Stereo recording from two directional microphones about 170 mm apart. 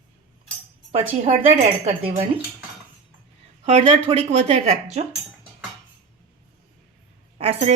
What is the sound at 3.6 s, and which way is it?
Speech, 40° right (ahead or behind).